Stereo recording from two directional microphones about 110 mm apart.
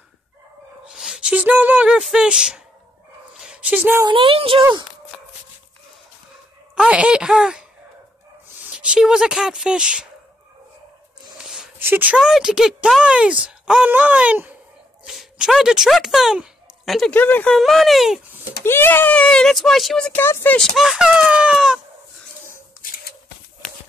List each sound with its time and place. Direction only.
0.8 s speech: 5° right (ahead or behind)
3.3 s dog: 10° right (ahead or behind)
4.1 s speech: 55° right (ahead or behind)
6.7 s speech: 10° right (ahead or behind)
11.3 s a sound: 5° right (ahead or behind)
11.8 s speech: 15° right (ahead or behind)
12.2 s speech: 5° right (ahead or behind)
15.0 s speech: 5° right (ahead or behind)
17.1 s speech: 15° left (ahead or behind)
17.6 s speech: centre (ahead or behind)
18.6 s speech: 20° left (ahead or behind); by 20.1 s centre (ahead or behind)
20.1 s speech: 20° left (ahead or behind)
20.5 s speech: centre (ahead or behind)